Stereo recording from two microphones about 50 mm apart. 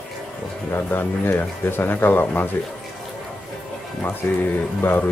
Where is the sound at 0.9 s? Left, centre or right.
Left.